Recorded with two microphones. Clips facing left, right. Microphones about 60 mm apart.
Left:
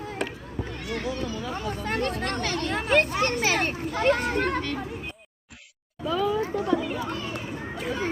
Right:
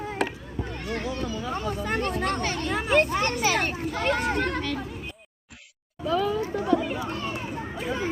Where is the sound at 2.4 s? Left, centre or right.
Left.